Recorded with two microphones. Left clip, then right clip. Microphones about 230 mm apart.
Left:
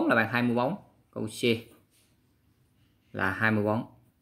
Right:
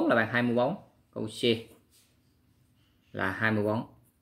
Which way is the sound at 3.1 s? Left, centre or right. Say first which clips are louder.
Left 2 dB; centre.